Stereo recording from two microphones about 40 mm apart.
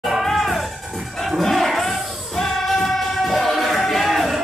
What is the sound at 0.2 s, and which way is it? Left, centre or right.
Music, centre.